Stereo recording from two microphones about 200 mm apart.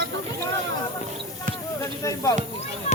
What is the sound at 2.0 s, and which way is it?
Speech, 15° left (ahead or behind).